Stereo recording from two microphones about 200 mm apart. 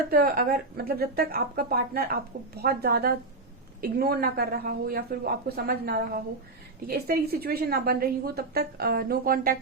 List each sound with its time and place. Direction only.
0.1 s a woman's voice: 50° right (ahead or behind)